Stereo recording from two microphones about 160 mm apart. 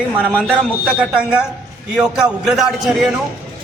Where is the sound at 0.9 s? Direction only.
5° right (ahead or behind).